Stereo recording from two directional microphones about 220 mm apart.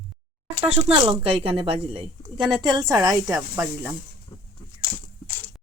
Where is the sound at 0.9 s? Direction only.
25° right (ahead or behind); by 3.9 s 10° right (ahead or behind).